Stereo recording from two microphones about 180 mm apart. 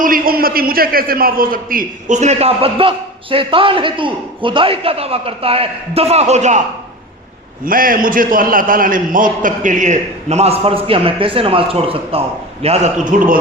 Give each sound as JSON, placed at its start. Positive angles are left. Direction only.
{"t": 0.0, "sound": "a man's voice", "side_deg": -55}
{"t": 7.6, "sound": "a man's voice", "side_deg": -50}